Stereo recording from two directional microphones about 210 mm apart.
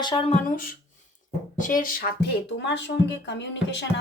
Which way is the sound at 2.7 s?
55° left (ahead or behind).